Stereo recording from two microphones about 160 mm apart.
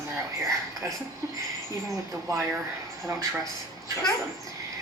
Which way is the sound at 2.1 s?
20° right (ahead or behind).